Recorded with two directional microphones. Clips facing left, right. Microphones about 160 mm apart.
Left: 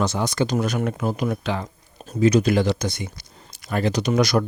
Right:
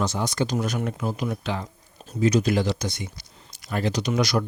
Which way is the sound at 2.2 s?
65° left (ahead or behind).